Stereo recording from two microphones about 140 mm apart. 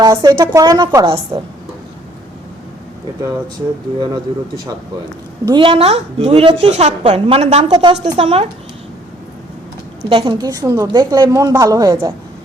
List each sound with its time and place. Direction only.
0.0 s a woman's voice: 25° right (ahead or behind)
4.0 s a man's voice: 30° right (ahead or behind); by 7.7 s 50° right (ahead or behind)
7.7 s a man's voice: 30° right (ahead or behind)
8.2 s a woman's voice: 45° right (ahead or behind)
10.1 s a woman's voice: 35° right (ahead or behind)